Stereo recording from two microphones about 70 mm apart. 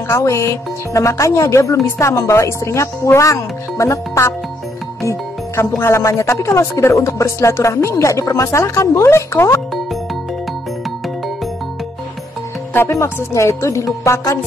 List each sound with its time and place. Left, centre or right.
0.1 s speech: left
5.8 s speech: left
12.7 s speech: left
14.0 s music: left